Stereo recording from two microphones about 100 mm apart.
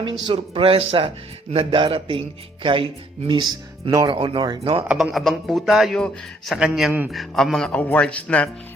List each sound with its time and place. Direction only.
0.0 s speech: 55° right (ahead or behind)
3.4 s speech: 45° right (ahead or behind)
5.1 s a man's voice: centre (ahead or behind)